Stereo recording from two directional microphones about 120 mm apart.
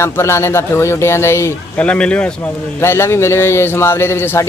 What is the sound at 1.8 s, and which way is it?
Speech, 10° left (ahead or behind).